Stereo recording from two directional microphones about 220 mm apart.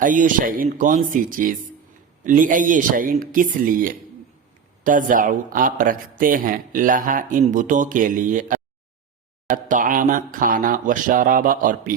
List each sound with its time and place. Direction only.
0.0 s a man's voice: 35° right (ahead or behind)